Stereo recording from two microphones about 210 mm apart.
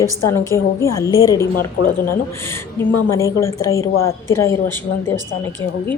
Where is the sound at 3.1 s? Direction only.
15° left (ahead or behind).